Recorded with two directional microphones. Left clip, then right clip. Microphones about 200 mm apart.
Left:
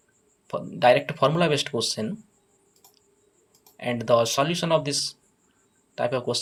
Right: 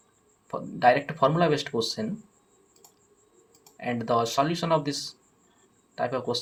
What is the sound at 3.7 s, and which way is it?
Speech, 30° left (ahead or behind).